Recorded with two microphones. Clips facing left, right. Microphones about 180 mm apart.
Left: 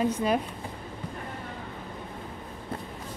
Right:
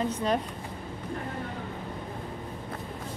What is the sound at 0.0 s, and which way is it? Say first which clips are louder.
Speech: left 2 dB; 10° left (ahead or behind).